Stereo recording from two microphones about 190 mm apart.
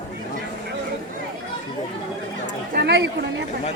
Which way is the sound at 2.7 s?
60° right (ahead or behind).